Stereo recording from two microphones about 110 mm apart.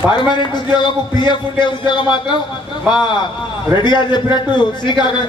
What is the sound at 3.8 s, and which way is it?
A man's voice, 40° left (ahead or behind).